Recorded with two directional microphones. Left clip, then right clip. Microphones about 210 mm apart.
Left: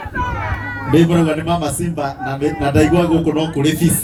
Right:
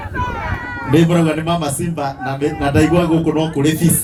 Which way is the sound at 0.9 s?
25° right (ahead or behind).